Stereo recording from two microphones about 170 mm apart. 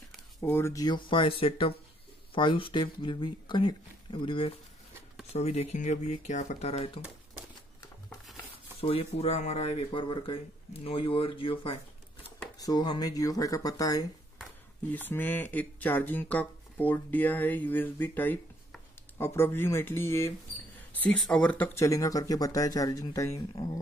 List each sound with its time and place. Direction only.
0.4 s speech: 15° left (ahead or behind); by 6.9 s 40° left (ahead or behind)
8.8 s speech: 35° left (ahead or behind)
14.9 s speech: 10° left (ahead or behind)